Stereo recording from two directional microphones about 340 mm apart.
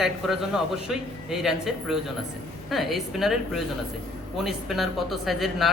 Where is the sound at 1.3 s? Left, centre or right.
Centre.